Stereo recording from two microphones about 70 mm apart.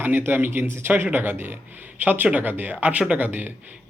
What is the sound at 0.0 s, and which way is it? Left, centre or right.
Speech, right.